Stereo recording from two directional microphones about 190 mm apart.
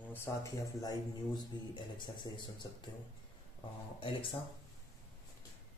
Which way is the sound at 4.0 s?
25° left (ahead or behind).